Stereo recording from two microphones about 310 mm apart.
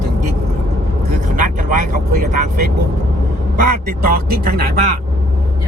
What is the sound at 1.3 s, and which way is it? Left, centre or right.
Speech, right.